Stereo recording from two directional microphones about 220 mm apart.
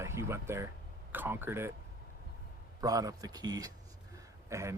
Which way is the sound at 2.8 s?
15° right (ahead or behind).